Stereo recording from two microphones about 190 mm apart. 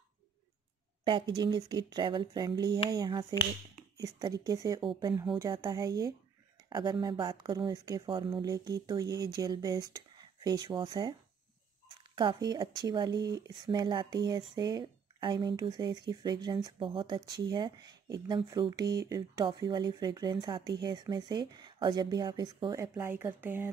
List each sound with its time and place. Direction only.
1.0 s speech: 25° right (ahead or behind)
12.2 s speech: 20° right (ahead or behind)